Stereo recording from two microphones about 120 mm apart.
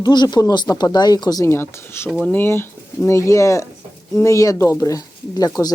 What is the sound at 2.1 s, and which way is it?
Speech, 5° left (ahead or behind).